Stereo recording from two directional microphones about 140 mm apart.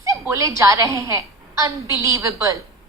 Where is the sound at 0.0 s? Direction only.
20° right (ahead or behind).